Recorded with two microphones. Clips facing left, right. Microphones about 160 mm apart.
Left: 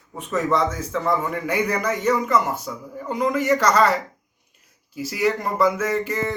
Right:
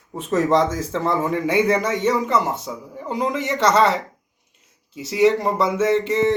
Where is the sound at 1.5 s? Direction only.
25° right (ahead or behind).